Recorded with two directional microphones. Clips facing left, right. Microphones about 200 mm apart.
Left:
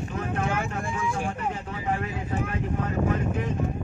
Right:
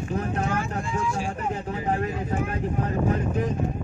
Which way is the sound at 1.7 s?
35° right (ahead or behind).